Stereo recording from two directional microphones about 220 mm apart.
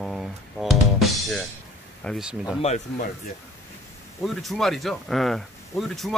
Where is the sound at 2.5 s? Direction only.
30° left (ahead or behind).